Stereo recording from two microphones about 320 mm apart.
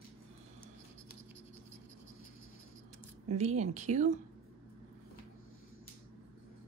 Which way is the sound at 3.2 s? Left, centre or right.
Right.